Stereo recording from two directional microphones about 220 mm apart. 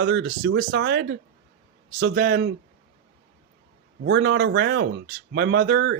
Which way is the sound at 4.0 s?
50° right (ahead or behind).